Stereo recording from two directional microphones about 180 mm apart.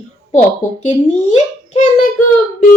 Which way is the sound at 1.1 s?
40° left (ahead or behind).